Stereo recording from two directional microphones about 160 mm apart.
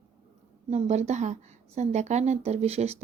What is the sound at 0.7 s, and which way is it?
A woman's voice, 45° right (ahead or behind).